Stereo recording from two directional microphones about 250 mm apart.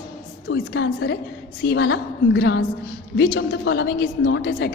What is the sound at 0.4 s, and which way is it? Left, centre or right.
A woman's voice, left.